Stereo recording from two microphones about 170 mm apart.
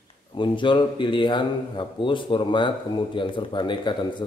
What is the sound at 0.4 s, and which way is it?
A man's voice, 30° left (ahead or behind).